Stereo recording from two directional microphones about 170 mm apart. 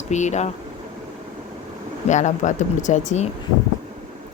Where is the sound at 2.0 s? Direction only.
45° left (ahead or behind).